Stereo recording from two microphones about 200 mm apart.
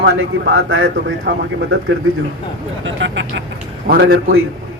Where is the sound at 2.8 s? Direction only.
65° right (ahead or behind).